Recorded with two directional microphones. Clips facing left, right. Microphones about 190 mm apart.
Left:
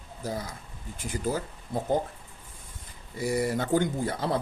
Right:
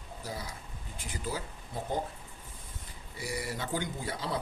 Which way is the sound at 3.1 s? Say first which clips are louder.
Left 10 dB; 45° left (ahead or behind).